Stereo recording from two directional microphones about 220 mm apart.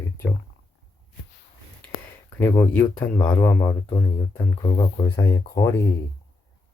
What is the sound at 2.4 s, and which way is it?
A man's voice, 10° left (ahead or behind).